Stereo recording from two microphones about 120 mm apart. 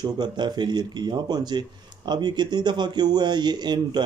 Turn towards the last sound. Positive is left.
turn(degrees=-35)  # may be behind; listen again after turning